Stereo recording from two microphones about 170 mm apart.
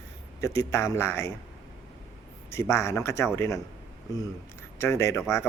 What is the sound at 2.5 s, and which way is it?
A man's voice, 15° left (ahead or behind).